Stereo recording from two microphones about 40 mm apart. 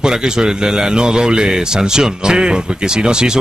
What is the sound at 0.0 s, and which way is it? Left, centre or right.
A man's voice, centre.